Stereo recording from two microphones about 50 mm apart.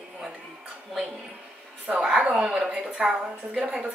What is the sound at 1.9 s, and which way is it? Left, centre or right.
A woman's voice, centre.